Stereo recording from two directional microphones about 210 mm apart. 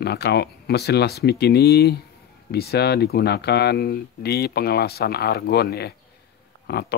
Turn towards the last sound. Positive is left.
turn(degrees=50)  # may be behind; listen again after turning